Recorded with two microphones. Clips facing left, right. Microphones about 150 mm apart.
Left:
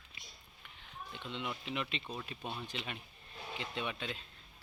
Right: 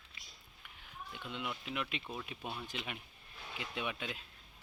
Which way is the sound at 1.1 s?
5° right (ahead or behind).